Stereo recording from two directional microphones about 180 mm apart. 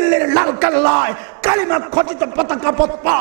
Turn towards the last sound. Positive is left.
turn(degrees=-15)  # may be behind; listen again after turning